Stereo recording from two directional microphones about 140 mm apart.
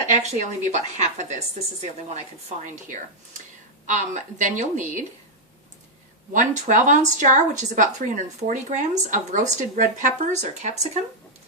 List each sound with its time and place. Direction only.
0.1 s speech: 55° right (ahead or behind)
3.8 s speech: 60° right (ahead or behind)
6.3 s speech: 65° right (ahead or behind)